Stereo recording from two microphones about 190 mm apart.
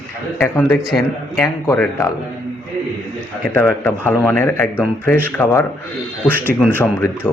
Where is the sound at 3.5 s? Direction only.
10° left (ahead or behind).